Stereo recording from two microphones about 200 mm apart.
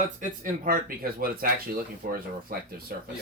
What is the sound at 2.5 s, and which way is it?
Speech, 45° right (ahead or behind).